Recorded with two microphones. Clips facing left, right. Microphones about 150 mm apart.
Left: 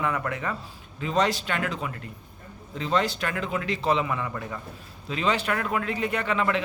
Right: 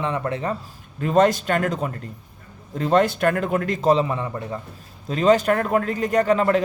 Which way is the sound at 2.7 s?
50° right (ahead or behind).